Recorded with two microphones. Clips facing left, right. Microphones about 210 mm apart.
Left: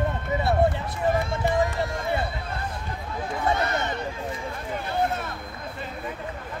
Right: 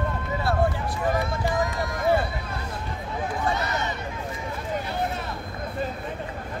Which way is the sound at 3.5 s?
50° left (ahead or behind).